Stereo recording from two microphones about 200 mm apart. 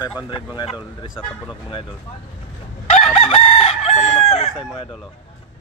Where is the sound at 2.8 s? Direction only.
30° left (ahead or behind).